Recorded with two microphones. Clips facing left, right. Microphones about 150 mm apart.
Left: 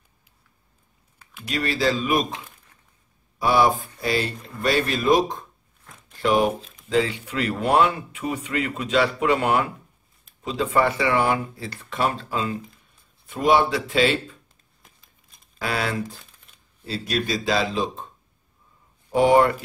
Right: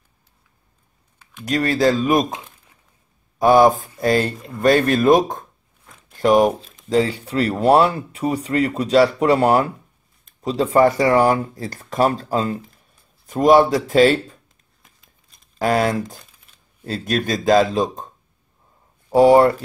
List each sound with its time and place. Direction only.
1.4 s speech: 45° right (ahead or behind)
3.3 s speech: 45° right (ahead or behind)
15.6 s speech: 45° right (ahead or behind)
16.5 s a sound: 5° right (ahead or behind)
16.8 s speech: 50° right (ahead or behind)